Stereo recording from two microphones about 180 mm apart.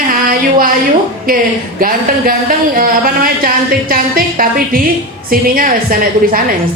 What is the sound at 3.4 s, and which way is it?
A woman's voice, 55° right (ahead or behind).